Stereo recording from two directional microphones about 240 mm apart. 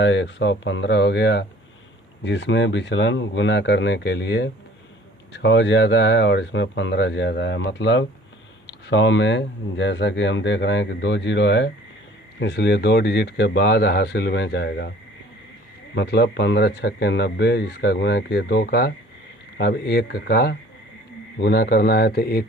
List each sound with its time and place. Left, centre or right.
0.0 s speech: left
16.0 s speech: left